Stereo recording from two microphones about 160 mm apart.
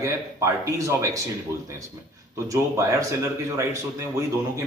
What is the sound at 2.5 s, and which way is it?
Speech, 20° right (ahead or behind).